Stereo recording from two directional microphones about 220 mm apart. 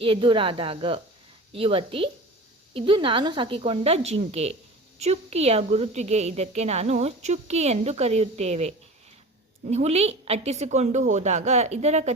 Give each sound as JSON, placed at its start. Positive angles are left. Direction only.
{"t": 0.0, "sound": "a woman's voice", "side_deg": -25}